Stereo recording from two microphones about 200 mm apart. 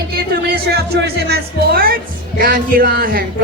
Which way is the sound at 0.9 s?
50° right (ahead or behind).